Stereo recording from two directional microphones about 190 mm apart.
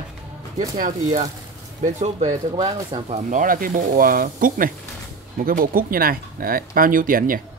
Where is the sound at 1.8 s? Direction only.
40° right (ahead or behind).